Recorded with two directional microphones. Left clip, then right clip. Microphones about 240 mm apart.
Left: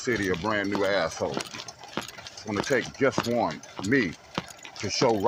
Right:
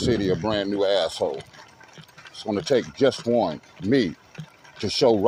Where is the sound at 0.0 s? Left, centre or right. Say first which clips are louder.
Right 4 dB; right.